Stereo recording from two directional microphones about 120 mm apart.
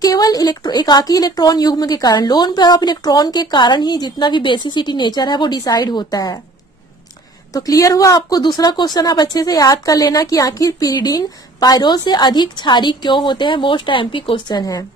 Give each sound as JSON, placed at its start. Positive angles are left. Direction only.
{"t": 0.0, "sound": "a woman's voice", "side_deg": 30}
{"t": 7.5, "sound": "a woman's voice", "side_deg": 30}
{"t": 14.6, "sound": "a woman's voice", "side_deg": 30}